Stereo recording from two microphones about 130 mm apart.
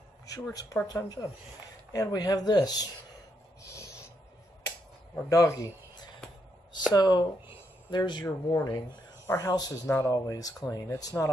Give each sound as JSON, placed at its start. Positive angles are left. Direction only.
{"t": 0.3, "sound": "speech", "side_deg": 25}
{"t": 3.6, "sound": "snort", "side_deg": 20}
{"t": 5.3, "sound": "speech", "side_deg": 25}
{"t": 9.2, "sound": "speech", "side_deg": 25}